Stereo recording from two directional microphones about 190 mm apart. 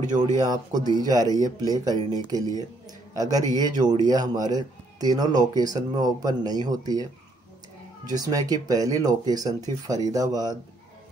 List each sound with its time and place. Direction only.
0.4 s speech: 20° right (ahead or behind)